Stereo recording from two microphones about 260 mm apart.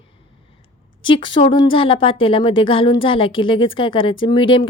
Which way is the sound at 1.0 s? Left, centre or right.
Centre.